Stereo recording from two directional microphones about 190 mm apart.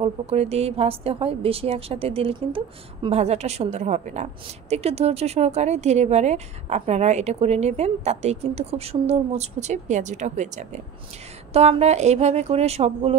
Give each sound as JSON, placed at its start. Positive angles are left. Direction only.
{"t": 0.0, "sound": "a woman's voice", "side_deg": -35}